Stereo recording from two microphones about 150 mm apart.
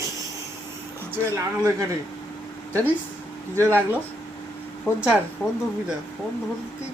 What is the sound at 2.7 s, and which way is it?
Speech, 10° right (ahead or behind).